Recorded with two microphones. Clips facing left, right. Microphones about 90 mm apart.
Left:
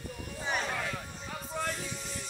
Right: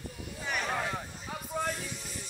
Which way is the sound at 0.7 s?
25° right (ahead or behind).